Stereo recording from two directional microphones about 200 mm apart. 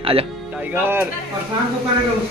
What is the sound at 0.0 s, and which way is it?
Speech, 30° right (ahead or behind).